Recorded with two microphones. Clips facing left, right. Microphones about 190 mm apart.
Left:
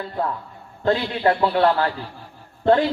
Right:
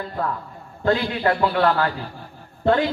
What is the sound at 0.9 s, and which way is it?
A man's voice, 25° left (ahead or behind).